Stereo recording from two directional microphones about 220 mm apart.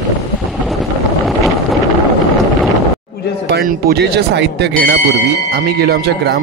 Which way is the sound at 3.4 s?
45° right (ahead or behind).